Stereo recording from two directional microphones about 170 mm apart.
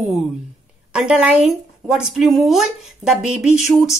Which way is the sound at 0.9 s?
5° right (ahead or behind).